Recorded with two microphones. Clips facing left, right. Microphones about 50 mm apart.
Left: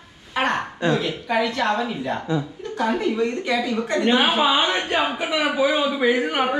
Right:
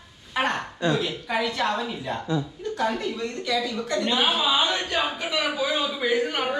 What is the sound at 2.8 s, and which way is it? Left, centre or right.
A woman's voice, left.